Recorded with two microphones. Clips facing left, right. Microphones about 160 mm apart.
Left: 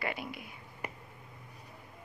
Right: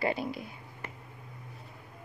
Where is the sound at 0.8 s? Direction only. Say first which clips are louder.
Left 3 dB; 15° left (ahead or behind).